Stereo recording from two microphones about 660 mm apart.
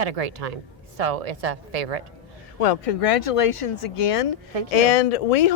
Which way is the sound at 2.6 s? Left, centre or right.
Left.